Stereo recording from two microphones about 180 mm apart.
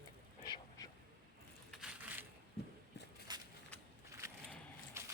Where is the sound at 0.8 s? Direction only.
20° left (ahead or behind).